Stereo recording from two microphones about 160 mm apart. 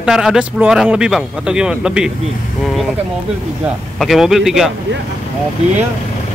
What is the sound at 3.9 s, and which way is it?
Speech, centre (ahead or behind).